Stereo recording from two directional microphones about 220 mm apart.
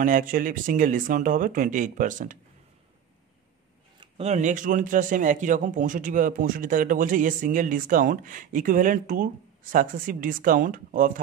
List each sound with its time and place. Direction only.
0.0 s a man's voice: 40° right (ahead or behind)
4.0 s a man's voice: 30° right (ahead or behind)